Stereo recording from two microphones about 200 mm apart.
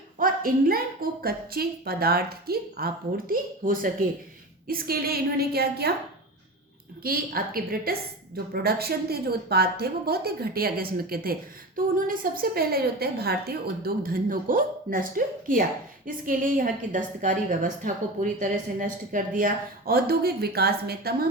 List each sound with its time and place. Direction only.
0.2 s a sound: 45° right (ahead or behind)
1.2 s a woman's voice: 50° right (ahead or behind)
7.0 s a woman's voice: 50° right (ahead or behind)